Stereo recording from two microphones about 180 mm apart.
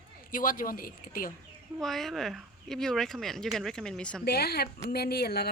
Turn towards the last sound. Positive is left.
turn(degrees=60)  # may be behind; listen again after turning